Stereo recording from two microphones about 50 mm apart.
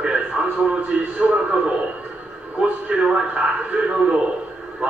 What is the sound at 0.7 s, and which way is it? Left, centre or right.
A man's voice, right.